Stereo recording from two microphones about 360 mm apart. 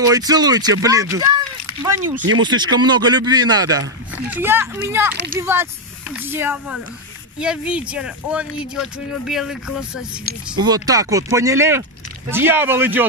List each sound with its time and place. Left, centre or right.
0.0 s speech: centre
2.1 s speech: right
2.4 s speech: centre